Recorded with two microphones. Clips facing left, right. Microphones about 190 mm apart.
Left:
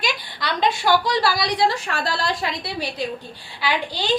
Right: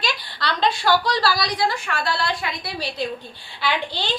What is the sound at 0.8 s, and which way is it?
Speech, 15° left (ahead or behind).